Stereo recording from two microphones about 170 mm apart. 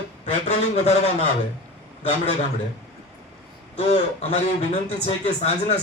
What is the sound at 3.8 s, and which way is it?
A man's voice, 40° left (ahead or behind).